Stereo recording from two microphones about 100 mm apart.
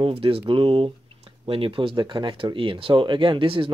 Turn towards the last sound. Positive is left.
turn(degrees=-60)  # may be behind; listen again after turning